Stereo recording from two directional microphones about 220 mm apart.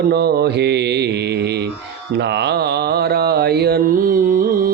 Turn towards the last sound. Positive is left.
turn(degrees=-40)  # may be behind; listen again after turning